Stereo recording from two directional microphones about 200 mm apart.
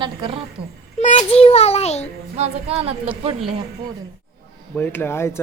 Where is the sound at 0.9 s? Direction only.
35° left (ahead or behind).